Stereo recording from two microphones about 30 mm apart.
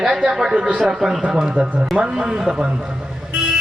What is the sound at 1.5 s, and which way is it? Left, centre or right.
Speech, right.